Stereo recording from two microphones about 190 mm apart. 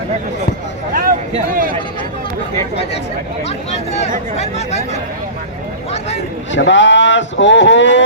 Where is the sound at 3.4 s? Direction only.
35° left (ahead or behind).